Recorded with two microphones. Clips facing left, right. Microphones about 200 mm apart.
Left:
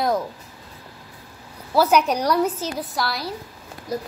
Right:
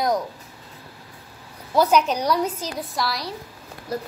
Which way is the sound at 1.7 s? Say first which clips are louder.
Left 1 dB; 5° left (ahead or behind).